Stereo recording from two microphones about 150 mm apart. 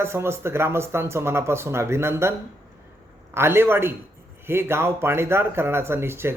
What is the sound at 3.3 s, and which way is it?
Speech, 15° right (ahead or behind).